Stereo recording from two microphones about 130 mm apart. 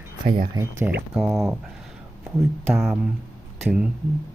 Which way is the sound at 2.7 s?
Centre (ahead or behind).